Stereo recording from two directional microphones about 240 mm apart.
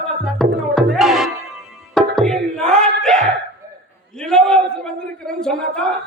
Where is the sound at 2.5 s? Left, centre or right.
Centre.